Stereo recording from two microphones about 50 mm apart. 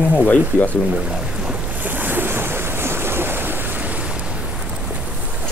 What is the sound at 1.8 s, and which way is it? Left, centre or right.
Waves, right.